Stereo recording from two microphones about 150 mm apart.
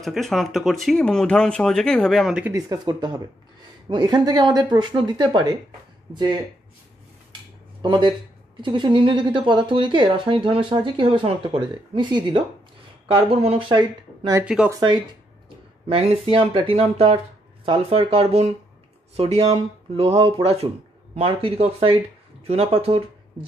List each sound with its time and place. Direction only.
0.0 s speech: centre (ahead or behind)
2.5 s speech: 25° right (ahead or behind)
7.8 s a woman's voice: 30° right (ahead or behind)
14.4 s speech: 5° right (ahead or behind)
14.7 s a woman's voice: 25° right (ahead or behind)